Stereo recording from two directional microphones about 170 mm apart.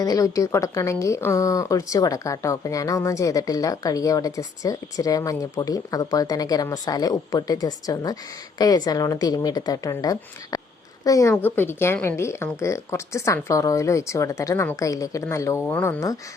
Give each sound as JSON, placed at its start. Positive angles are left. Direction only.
{"t": 0.0, "sound": "a woman's voice", "side_deg": 20}